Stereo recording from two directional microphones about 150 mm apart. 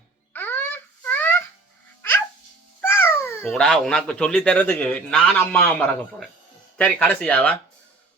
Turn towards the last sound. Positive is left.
turn(degrees=10)  # may be behind; listen again after turning